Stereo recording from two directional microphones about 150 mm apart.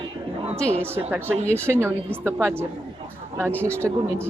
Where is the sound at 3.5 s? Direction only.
10° left (ahead or behind).